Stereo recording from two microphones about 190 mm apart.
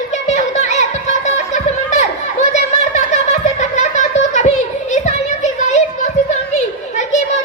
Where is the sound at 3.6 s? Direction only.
40° left (ahead or behind).